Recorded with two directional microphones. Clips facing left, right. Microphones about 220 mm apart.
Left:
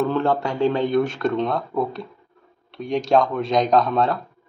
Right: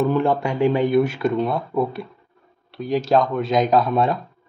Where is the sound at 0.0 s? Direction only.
15° right (ahead or behind).